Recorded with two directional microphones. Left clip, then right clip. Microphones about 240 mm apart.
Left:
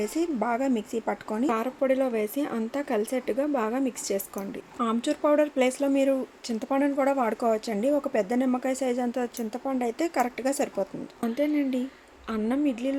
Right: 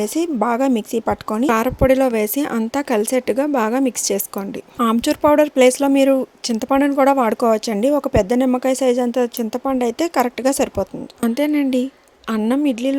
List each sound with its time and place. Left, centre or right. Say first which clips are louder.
0.0 s speech: right 8 dB; right